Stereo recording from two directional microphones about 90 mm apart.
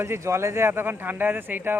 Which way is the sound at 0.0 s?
30° right (ahead or behind).